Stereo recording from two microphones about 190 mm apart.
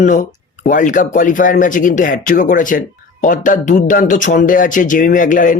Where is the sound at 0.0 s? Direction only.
40° left (ahead or behind).